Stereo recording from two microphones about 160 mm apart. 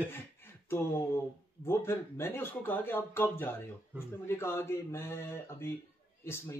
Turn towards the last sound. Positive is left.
turn(degrees=15)  # may be behind; listen again after turning